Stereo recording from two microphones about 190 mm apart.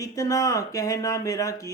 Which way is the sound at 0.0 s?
15° left (ahead or behind).